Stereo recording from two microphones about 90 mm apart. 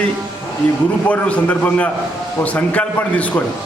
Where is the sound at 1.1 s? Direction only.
15° left (ahead or behind).